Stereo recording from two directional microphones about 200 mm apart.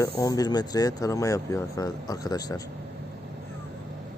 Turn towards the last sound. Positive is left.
turn(degrees=20)  # may be behind; listen again after turning